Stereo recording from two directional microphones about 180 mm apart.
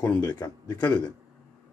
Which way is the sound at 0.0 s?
10° left (ahead or behind).